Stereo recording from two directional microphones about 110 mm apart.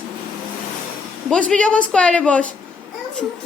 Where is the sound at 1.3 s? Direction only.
10° left (ahead or behind).